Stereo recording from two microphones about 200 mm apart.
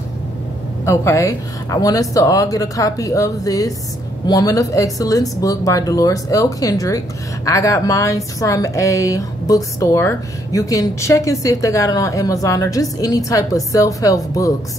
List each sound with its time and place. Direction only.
0.8 s a woman's voice: 15° left (ahead or behind)